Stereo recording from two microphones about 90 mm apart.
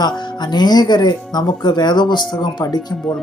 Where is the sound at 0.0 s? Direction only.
55° left (ahead or behind).